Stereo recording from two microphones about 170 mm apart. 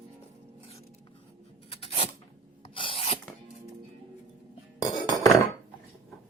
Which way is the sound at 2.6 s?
30° left (ahead or behind).